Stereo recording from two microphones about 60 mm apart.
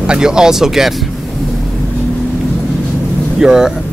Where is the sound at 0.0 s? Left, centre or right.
Centre.